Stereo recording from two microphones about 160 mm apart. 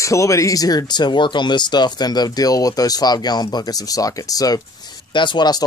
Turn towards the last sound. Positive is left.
turn(degrees=25)  # may be behind; listen again after turning